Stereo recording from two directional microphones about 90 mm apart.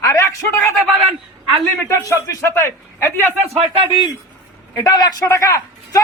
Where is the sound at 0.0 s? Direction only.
35° left (ahead or behind).